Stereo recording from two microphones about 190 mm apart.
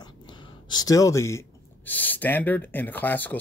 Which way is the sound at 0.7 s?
20° left (ahead or behind).